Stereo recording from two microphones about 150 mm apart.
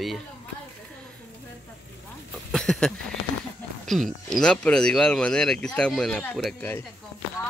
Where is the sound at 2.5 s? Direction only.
5° left (ahead or behind).